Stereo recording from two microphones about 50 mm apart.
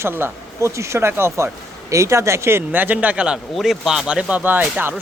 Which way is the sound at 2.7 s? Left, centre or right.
Right.